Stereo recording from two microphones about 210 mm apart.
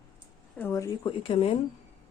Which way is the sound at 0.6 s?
10° left (ahead or behind).